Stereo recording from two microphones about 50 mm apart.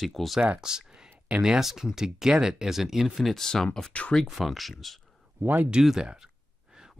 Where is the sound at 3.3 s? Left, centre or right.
Centre.